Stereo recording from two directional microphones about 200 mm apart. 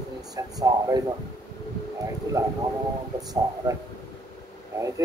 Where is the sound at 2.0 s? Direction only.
15° right (ahead or behind).